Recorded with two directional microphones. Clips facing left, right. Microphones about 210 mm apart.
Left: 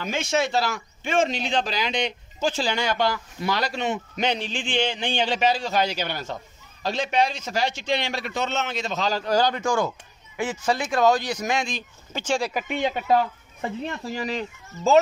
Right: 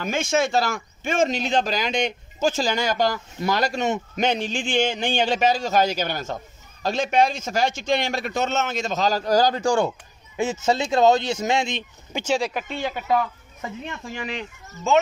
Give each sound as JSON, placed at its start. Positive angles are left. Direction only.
{"t": 0.0, "sound": "speech", "side_deg": -50}
{"t": 12.1, "sound": "speech", "side_deg": -10}
{"t": 12.6, "sound": "speech", "side_deg": 20}